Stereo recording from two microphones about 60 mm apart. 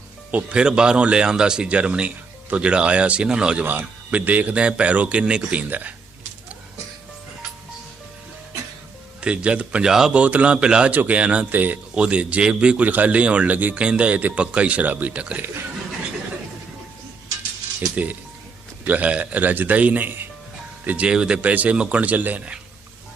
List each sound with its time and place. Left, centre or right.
0.3 s speech: right
3.7 s a man's voice: right
9.2 s a man's voice: centre
9.9 s speech: centre
10.2 s a man's voice: right
10.9 s a man's voice: right
17.9 s a man's voice: right